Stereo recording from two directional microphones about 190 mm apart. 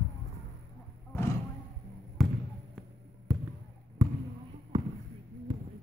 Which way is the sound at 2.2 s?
Centre (ahead or behind).